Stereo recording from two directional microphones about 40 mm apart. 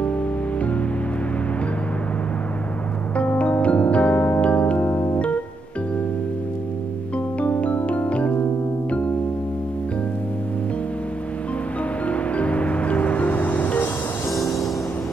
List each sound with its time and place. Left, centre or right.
3.2 s music: left
7.3 s music: left
12.1 s music: left
14.3 s music: centre